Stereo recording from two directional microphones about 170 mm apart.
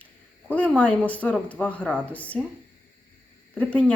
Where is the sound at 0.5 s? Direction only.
5° left (ahead or behind).